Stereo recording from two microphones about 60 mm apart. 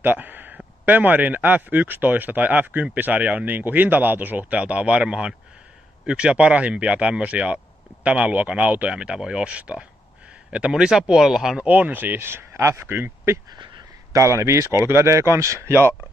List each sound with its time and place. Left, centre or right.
0.0 s a sound: right
0.8 s speech: right; by 11.6 s centre
11.6 s speech: right
12.8 s speech: right
15.1 s speech: right